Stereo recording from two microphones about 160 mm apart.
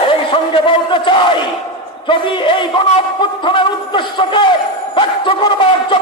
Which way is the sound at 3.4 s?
30° left (ahead or behind).